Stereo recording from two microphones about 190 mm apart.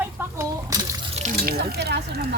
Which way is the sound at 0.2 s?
15° right (ahead or behind).